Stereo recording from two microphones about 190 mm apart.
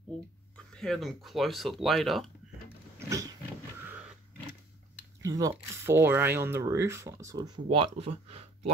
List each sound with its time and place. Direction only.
0.7 s speech: centre (ahead or behind)
3.1 s wild animals: 20° right (ahead or behind)
5.2 s speech: 15° right (ahead or behind)